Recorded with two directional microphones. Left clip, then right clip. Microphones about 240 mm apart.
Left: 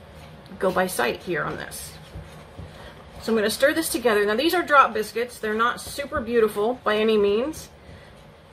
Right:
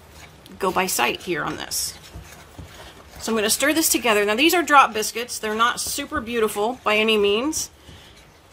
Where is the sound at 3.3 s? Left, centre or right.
Right.